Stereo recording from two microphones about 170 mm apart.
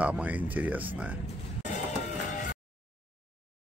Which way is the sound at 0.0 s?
10° right (ahead or behind).